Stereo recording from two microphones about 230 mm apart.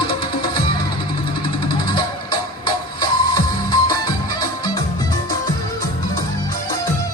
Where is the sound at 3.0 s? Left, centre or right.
Centre.